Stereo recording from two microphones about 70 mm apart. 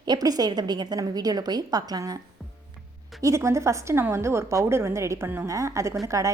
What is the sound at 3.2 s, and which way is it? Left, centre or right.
A woman's voice, right.